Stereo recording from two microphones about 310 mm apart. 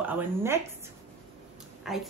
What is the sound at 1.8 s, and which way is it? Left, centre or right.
Speech, centre.